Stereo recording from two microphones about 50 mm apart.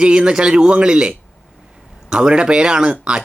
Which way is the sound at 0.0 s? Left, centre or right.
Centre.